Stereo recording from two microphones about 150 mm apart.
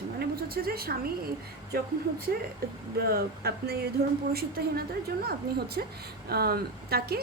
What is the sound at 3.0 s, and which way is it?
A woman's voice, 90° right.